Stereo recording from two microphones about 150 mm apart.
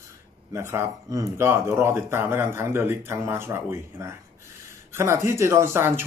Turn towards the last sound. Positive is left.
turn(degrees=-15)  # may be behind; listen again after turning